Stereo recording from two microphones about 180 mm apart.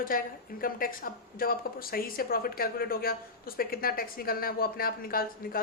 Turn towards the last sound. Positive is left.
turn(degrees=55)  # may be behind; listen again after turning